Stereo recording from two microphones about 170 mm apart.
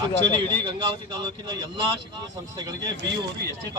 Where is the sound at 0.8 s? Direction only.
25° right (ahead or behind).